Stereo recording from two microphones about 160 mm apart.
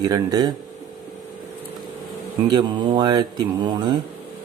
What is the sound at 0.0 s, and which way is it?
Speech, 25° right (ahead or behind).